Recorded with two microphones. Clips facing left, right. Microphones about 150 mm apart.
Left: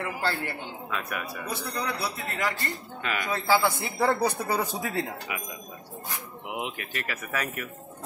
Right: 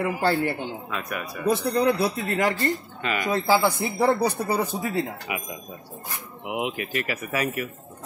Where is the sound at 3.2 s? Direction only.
15° right (ahead or behind).